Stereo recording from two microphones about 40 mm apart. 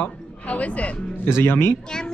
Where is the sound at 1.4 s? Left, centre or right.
Left.